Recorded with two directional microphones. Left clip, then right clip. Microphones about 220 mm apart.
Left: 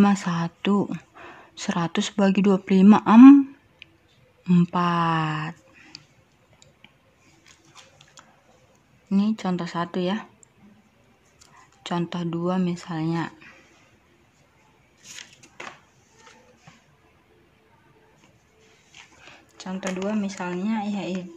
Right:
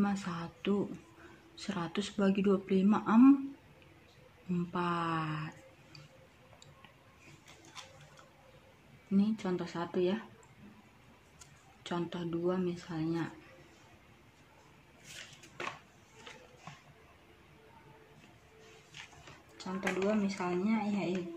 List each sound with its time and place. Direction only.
0.0 s speech: 40° left (ahead or behind)
4.5 s speech: 45° left (ahead or behind)
9.1 s speech: 50° left (ahead or behind)
11.8 s speech: 45° left (ahead or behind)
19.5 s speech: 35° left (ahead or behind)